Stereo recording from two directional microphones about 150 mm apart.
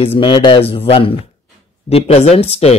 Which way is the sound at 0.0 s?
35° left (ahead or behind).